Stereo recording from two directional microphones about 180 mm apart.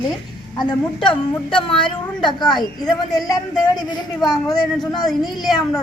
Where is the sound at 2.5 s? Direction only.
Centre (ahead or behind).